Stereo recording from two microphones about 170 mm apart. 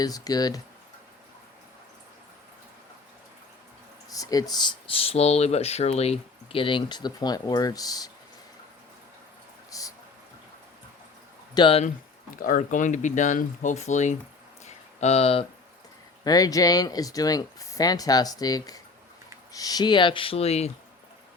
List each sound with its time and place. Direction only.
0.0 s speech: 20° left (ahead or behind)
4.1 s speech: 20° left (ahead or behind)
9.6 s a sound: 20° left (ahead or behind)
11.5 s speech: 30° left (ahead or behind)
12.4 s speech: 50° left (ahead or behind)
14.6 s a sound: 40° left (ahead or behind)
16.2 s speech: 20° left (ahead or behind)